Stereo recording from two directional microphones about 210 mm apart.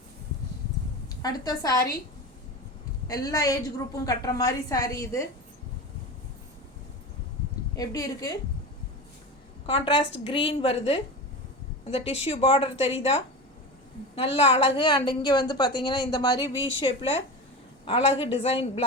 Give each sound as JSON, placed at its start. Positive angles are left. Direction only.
{"t": 1.2, "sound": "a woman's voice", "side_deg": 20}
{"t": 3.1, "sound": "a woman's voice", "side_deg": 15}
{"t": 7.8, "sound": "a woman's voice", "side_deg": 15}
{"t": 9.6, "sound": "a woman's voice", "side_deg": 25}
{"t": 14.3, "sound": "a woman's voice", "side_deg": 25}